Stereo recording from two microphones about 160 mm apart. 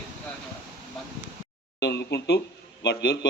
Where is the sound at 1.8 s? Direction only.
90° left.